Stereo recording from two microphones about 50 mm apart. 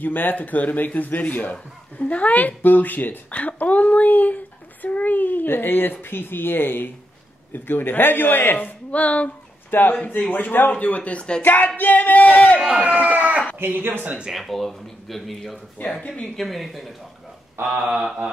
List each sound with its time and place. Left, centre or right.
0.0 s a man's voice: left
9.7 s a man's voice: left
10.7 s speech: left
11.4 s speech: left
12.5 s speech: centre
12.8 s speech: right
13.6 s speech: right
14.3 s speech: centre
16.0 s speech: left
16.3 s speech: centre
17.6 s mantra: right